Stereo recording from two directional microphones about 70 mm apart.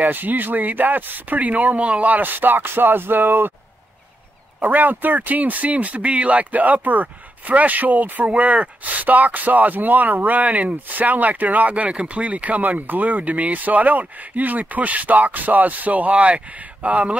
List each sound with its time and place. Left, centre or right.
0.0 s speech: right
4.6 s speech: right